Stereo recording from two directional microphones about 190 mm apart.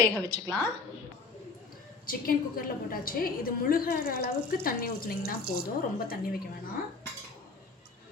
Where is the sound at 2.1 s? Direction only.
50° left (ahead or behind).